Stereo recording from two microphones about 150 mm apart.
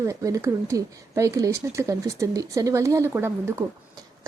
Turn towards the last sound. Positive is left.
turn(degrees=-15)  # may be behind; listen again after turning